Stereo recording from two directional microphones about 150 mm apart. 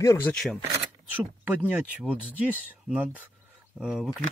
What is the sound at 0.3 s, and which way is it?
Speech, centre (ahead or behind).